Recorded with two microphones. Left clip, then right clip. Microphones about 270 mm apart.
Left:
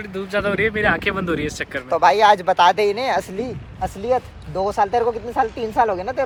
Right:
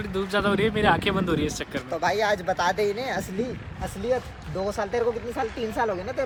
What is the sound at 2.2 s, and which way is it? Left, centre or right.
Speech, centre.